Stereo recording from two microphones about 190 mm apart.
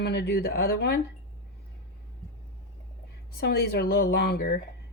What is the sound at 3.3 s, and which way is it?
Speech, 55° left (ahead or behind).